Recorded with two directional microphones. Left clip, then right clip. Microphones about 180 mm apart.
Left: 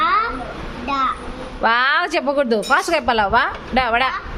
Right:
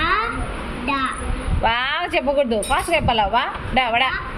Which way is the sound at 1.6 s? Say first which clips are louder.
Left 4 dB; 30° left (ahead or behind).